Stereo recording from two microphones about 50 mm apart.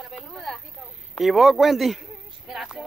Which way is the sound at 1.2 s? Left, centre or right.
Centre.